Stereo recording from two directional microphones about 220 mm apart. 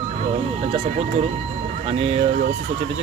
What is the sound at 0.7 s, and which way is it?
Speech, 30° right (ahead or behind).